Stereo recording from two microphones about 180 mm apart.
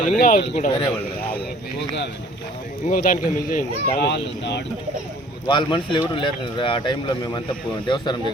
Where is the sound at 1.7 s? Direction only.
70° left (ahead or behind).